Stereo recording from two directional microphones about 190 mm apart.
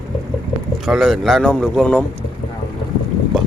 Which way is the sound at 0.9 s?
Centre (ahead or behind).